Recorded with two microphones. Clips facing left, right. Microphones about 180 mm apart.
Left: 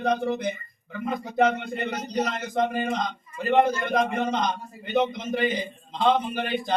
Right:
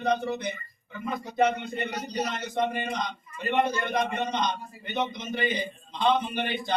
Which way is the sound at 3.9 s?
90° left.